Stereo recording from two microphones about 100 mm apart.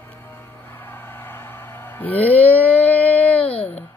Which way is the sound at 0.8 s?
20° left (ahead or behind).